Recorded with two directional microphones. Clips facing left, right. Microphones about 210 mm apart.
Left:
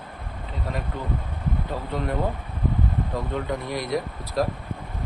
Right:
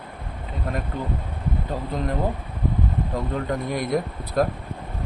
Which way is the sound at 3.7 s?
50° right (ahead or behind).